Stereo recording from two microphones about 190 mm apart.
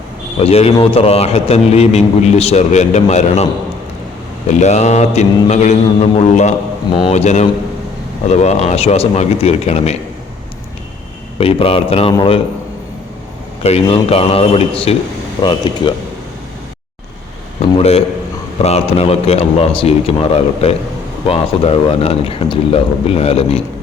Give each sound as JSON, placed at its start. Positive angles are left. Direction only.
{"t": 0.3, "sound": "a man's voice", "side_deg": 30}
{"t": 11.3, "sound": "a man's voice", "side_deg": 30}
{"t": 13.6, "sound": "a man's voice", "side_deg": 35}
{"t": 17.7, "sound": "a man's voice", "side_deg": 30}